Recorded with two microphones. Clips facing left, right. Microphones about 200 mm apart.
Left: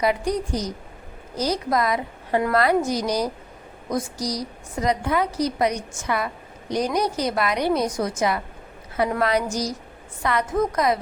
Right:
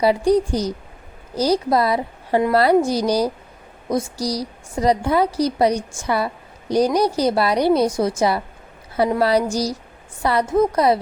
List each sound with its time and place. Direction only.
0.0 s a woman's voice: 30° right (ahead or behind)